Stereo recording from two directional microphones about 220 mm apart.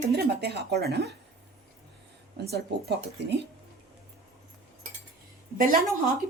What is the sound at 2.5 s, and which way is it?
Speech, 50° right (ahead or behind).